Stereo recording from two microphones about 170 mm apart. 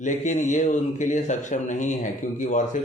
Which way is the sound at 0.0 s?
45° left (ahead or behind).